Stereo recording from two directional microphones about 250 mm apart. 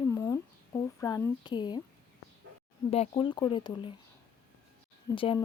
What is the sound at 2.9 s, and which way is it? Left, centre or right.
Speech, left.